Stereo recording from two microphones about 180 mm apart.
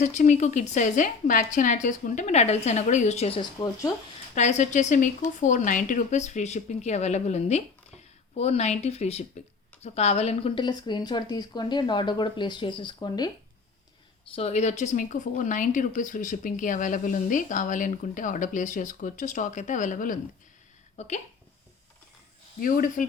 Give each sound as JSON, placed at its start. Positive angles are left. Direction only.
{"t": 0.0, "sound": "speech", "side_deg": 45}
{"t": 4.4, "sound": "a woman's voice", "side_deg": 40}
{"t": 14.3, "sound": "speech", "side_deg": 35}
{"t": 22.6, "sound": "speech", "side_deg": 50}